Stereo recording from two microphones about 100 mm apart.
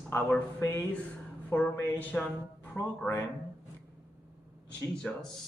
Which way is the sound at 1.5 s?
30° left (ahead or behind).